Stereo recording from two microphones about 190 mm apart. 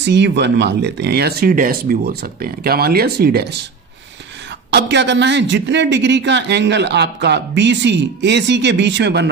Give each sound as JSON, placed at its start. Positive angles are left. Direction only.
{"t": 0.0, "sound": "speech", "side_deg": -65}
{"t": 4.6, "sound": "speech", "side_deg": -65}